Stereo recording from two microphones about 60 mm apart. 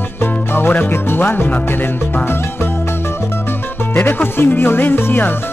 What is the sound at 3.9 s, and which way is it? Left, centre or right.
Speech, left.